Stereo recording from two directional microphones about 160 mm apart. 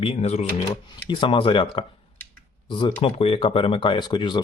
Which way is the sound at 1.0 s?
30° left (ahead or behind).